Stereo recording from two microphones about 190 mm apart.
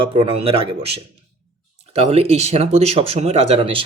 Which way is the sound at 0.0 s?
30° right (ahead or behind).